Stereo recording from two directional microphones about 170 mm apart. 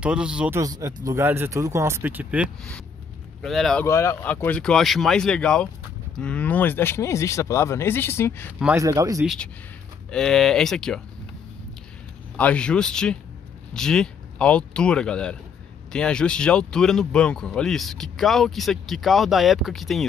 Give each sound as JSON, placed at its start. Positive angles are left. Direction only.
{"t": 0.0, "sound": "speech", "side_deg": -5}
{"t": 0.6, "sound": "speech", "side_deg": -20}
{"t": 3.4, "sound": "speech", "side_deg": 0}
{"t": 3.8, "sound": "speech", "side_deg": 15}
{"t": 8.7, "sound": "speech", "side_deg": -20}
{"t": 9.2, "sound": "speech", "side_deg": 0}
{"t": 12.4, "sound": "speech", "side_deg": 5}